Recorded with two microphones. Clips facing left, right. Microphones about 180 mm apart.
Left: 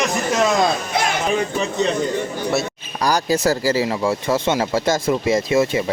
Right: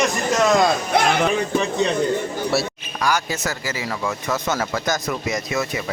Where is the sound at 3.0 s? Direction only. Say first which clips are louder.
Left 5 dB; 35° left (ahead or behind).